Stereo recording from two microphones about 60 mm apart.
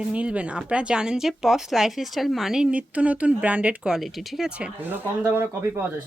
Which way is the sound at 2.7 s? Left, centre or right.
Right.